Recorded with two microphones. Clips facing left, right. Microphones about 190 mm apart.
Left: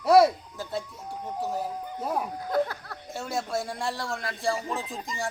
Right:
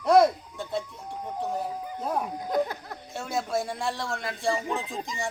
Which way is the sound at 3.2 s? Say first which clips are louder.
Right 1 dB; centre (ahead or behind).